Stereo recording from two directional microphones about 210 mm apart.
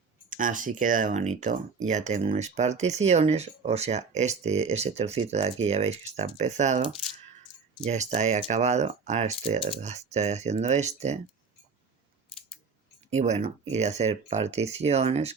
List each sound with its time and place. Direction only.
0.3 s speech: 40° right (ahead or behind)
13.1 s speech: 30° right (ahead or behind)